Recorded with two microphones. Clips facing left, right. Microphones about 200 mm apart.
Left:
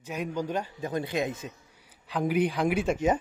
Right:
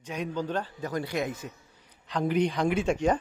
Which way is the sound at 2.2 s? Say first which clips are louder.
Even; 5° left (ahead or behind).